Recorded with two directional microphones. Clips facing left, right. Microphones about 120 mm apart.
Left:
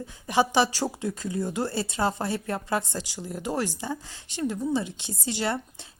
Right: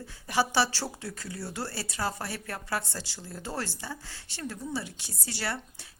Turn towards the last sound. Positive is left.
turn(degrees=20)  # may be behind; listen again after turning